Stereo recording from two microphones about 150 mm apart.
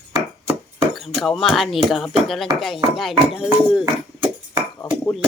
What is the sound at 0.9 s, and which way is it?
Speech, centre (ahead or behind).